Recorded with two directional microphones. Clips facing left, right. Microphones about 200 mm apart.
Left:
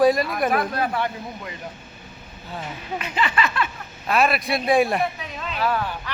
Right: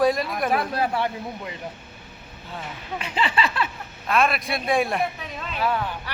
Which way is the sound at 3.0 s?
30° right (ahead or behind).